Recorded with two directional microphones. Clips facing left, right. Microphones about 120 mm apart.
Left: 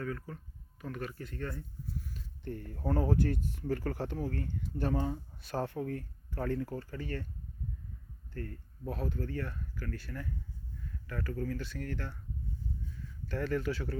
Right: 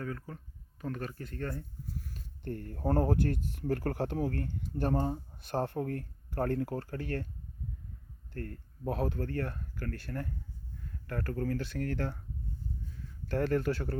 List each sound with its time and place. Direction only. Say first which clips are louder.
0.0 s speech: left 1 dB; 30° right (ahead or behind); by 4.4 s 65° right (ahead or behind)
4.8 s speech: right 2 dB; 50° right (ahead or behind); by 7.3 s 65° right (ahead or behind)
8.3 s speech: right 1 dB; 55° right (ahead or behind); by 12.1 s 75° right (ahead or behind)
13.2 s speech: right 4 dB; 65° right (ahead or behind)